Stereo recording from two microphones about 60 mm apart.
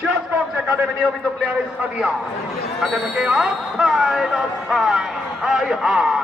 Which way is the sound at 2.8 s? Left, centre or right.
Centre.